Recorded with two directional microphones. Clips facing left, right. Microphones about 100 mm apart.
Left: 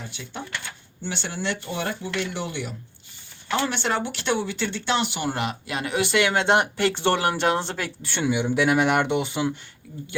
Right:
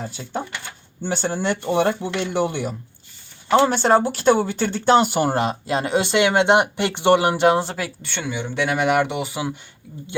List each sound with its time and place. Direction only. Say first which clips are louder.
0.0 s speech: right 7 dB; 40° right (ahead or behind)
3.5 s speech: right 9 dB; 40° right (ahead or behind); by 7.9 s 10° right (ahead or behind)
8.0 s speech: left 4 dB; 5° left (ahead or behind)